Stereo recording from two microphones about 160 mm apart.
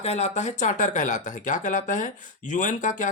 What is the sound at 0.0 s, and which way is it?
Speech, 45° left (ahead or behind).